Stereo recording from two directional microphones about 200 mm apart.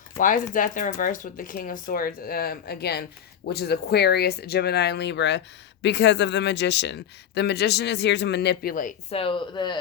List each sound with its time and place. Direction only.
0.2 s speech: 40° left (ahead or behind); by 9.7 s 25° left (ahead or behind)